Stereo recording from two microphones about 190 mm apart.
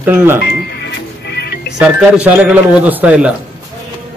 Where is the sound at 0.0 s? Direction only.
10° right (ahead or behind).